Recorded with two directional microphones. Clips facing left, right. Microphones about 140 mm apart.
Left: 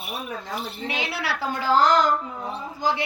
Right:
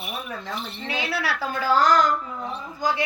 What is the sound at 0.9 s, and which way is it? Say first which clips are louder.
Speech: right 3 dB; 25° left (ahead or behind).